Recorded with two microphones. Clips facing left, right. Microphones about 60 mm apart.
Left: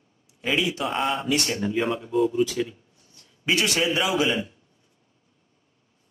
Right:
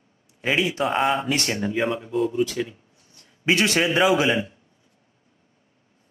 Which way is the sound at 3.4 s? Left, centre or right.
Right.